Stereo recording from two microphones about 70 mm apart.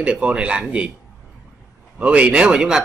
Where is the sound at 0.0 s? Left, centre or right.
Centre.